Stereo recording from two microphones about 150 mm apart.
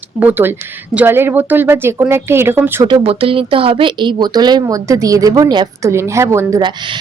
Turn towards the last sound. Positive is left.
turn(degrees=-30)  # may be behind; listen again after turning